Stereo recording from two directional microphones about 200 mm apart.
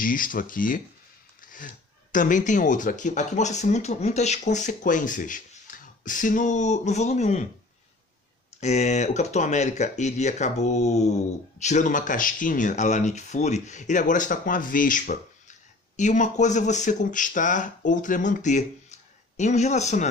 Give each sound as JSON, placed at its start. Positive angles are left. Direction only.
{"t": 0.0, "sound": "speech", "side_deg": 45}
{"t": 1.4, "sound": "a sound", "side_deg": 40}
{"t": 2.1, "sound": "speech", "side_deg": 40}
{"t": 8.5, "sound": "speech", "side_deg": 35}